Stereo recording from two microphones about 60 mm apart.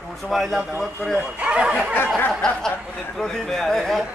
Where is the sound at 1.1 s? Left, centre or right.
Right.